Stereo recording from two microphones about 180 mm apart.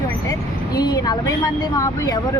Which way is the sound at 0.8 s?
20° left (ahead or behind).